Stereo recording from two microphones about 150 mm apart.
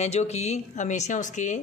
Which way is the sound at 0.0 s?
45° left (ahead or behind).